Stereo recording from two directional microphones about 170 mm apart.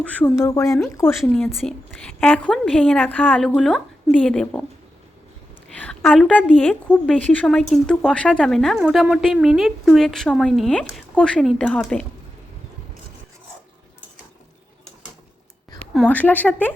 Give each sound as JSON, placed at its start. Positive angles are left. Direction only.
{"t": 0.0, "sound": "speech", "side_deg": 10}
{"t": 1.2, "sound": "a woman's voice", "side_deg": 5}
{"t": 5.6, "sound": "a woman's voice", "side_deg": 5}
{"t": 15.8, "sound": "speech", "side_deg": 5}